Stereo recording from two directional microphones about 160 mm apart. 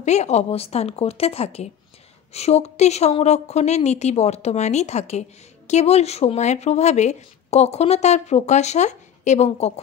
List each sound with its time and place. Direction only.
0.0 s a woman's voice: 45° left (ahead or behind)